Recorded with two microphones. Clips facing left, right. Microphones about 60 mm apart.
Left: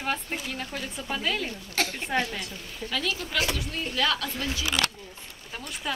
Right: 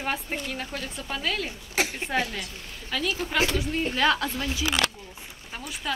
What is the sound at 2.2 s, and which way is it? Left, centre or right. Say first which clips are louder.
Speech: even; centre.